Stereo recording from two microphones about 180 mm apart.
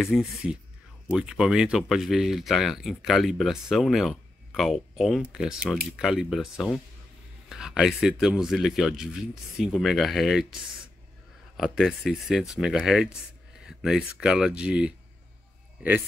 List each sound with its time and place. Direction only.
0.0 s speech: 5° right (ahead or behind)